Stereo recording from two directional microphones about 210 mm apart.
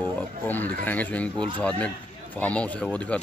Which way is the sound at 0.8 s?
10° left (ahead or behind).